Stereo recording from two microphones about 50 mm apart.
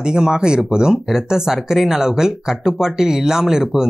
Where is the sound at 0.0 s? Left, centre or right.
Centre.